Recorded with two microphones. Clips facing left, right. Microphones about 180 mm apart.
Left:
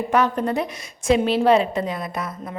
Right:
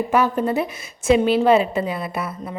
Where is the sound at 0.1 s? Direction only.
5° right (ahead or behind).